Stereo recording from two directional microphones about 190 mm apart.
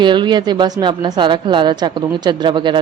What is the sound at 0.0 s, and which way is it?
A woman's voice, 25° right (ahead or behind).